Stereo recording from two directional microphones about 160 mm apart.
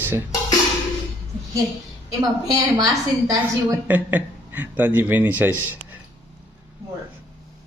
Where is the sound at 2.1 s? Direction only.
20° right (ahead or behind).